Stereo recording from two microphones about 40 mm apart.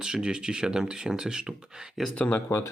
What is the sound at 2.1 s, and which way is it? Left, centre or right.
Speech, left.